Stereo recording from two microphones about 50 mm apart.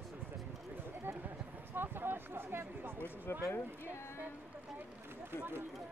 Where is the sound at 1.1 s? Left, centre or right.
Right.